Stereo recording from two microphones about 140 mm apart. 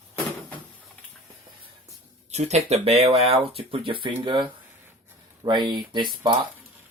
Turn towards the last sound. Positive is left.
turn(degrees=-35)  # may be behind; listen again after turning